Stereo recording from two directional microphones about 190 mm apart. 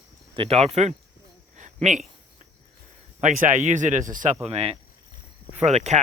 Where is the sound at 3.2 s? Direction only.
40° right (ahead or behind).